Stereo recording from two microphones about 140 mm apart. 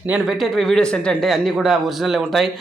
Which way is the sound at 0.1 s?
Centre (ahead or behind).